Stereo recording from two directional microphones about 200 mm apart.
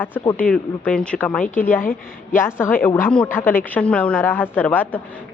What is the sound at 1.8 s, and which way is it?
Speech, 45° left (ahead or behind).